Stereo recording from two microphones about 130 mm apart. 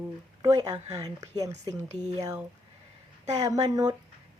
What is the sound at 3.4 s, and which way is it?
Speech, 30° right (ahead or behind).